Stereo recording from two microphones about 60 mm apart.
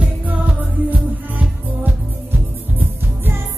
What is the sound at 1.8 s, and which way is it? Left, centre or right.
Music, right.